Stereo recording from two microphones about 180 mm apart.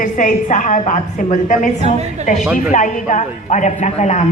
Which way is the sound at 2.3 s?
40° left (ahead or behind).